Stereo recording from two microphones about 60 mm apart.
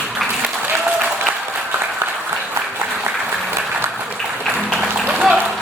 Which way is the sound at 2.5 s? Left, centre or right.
Right.